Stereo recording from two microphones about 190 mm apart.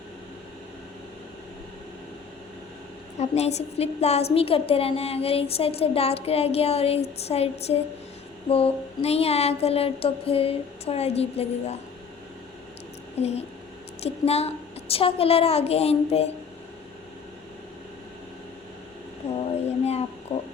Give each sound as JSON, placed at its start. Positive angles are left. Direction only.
{"t": 3.2, "sound": "a woman's voice", "side_deg": 35}
{"t": 13.2, "sound": "a woman's voice", "side_deg": 35}
{"t": 19.2, "sound": "a sound", "side_deg": 35}